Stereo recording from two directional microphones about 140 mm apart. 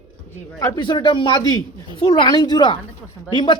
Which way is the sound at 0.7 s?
35° left (ahead or behind).